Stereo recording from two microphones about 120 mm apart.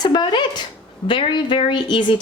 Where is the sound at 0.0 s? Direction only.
35° left (ahead or behind).